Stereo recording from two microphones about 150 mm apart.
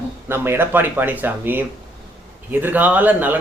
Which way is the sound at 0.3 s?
15° right (ahead or behind).